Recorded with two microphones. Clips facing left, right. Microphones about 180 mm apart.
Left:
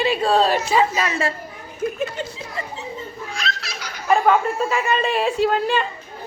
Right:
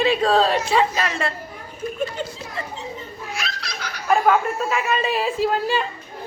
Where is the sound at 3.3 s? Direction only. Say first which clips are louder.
Left 1 dB; centre (ahead or behind).